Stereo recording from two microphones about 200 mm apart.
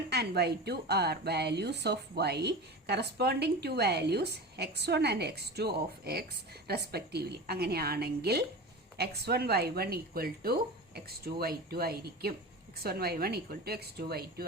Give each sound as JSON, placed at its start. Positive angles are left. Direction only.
{"t": 0.1, "sound": "a woman's voice", "side_deg": -55}